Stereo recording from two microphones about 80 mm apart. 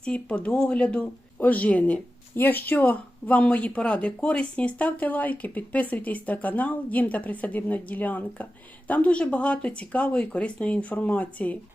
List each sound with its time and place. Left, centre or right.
0.0 s speech: centre